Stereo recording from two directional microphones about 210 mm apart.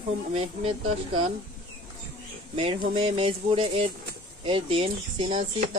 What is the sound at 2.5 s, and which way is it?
Speech, 25° right (ahead or behind).